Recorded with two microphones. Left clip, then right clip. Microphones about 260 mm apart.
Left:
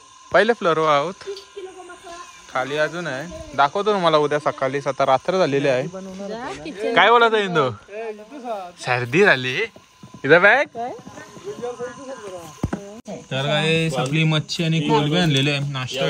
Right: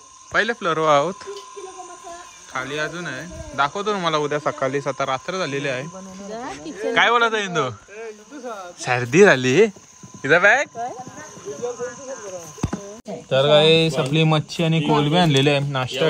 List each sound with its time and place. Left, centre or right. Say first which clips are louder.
0.3 s speech: left 4 dB; centre
2.5 s speech: left 4 dB; centre
6.2 s a sound: left 1 dB; left
7.0 s speech: left 3 dB; centre
7.9 s a sound: left 4 dB; left
8.9 s speech: right 2 dB; centre
10.2 s speech: left 2 dB; centre
13.1 s speech: right 7 dB; centre